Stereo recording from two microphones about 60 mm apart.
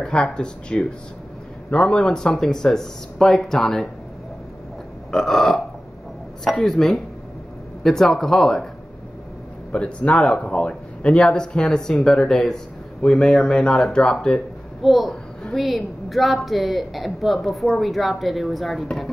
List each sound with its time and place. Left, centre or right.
0.0 s a man's voice: centre
5.1 s speech: centre
6.6 s a man's voice: centre
9.7 s a man's voice: centre
14.8 s speech: centre